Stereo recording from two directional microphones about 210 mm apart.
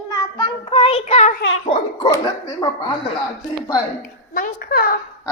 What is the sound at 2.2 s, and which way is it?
Speech, 15° left (ahead or behind).